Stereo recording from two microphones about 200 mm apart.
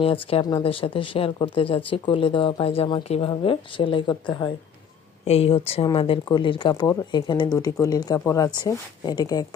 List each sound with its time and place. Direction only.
0.0 s speech: 30° left (ahead or behind)